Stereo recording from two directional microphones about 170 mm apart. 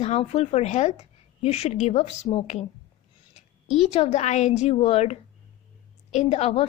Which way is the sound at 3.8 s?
40° left (ahead or behind).